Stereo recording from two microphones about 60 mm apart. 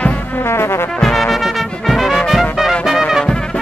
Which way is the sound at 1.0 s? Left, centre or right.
Centre.